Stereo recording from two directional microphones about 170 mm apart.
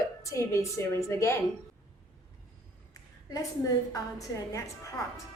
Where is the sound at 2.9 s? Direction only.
20° left (ahead or behind).